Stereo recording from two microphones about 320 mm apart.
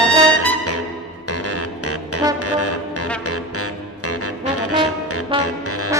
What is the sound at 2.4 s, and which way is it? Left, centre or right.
Music, left.